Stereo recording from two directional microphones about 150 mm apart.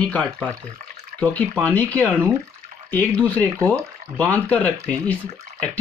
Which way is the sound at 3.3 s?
10° left (ahead or behind).